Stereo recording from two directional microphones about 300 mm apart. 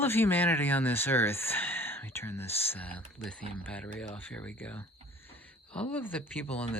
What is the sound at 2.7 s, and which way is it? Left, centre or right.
Speech, centre.